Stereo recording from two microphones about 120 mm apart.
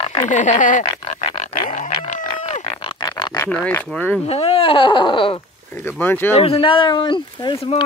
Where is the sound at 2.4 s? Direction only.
70° left (ahead or behind).